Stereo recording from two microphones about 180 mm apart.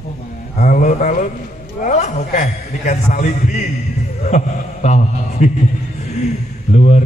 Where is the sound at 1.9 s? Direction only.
40° left (ahead or behind).